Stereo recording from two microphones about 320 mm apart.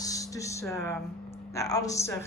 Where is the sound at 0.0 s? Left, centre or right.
Centre.